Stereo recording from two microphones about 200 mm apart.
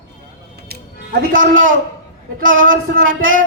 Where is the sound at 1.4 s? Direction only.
80° right.